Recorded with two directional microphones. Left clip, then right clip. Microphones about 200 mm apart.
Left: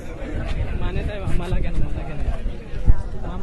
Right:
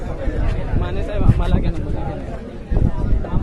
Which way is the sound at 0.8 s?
15° left (ahead or behind).